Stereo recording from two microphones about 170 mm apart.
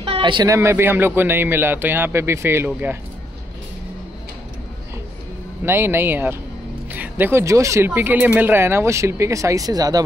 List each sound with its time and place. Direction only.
0.0 s a sound: 30° right (ahead or behind)
0.6 s speech: 15° right (ahead or behind)
5.7 s speech: 15° right (ahead or behind)